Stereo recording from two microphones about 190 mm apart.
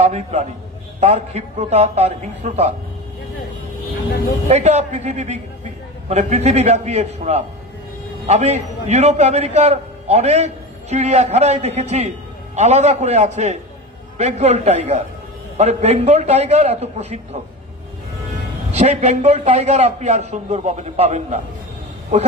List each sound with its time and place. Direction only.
0.0 s a man's voice: 35° right (ahead or behind)
4.5 s a man's voice: 35° right (ahead or behind)
18.7 s a man's voice: 35° right (ahead or behind)